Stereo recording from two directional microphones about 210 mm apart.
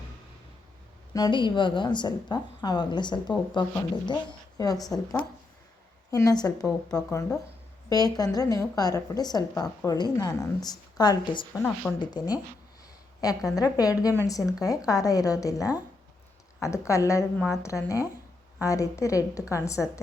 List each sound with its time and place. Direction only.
1.1 s a woman's voice: 20° left (ahead or behind)
13.6 s a woman's voice: 15° left (ahead or behind)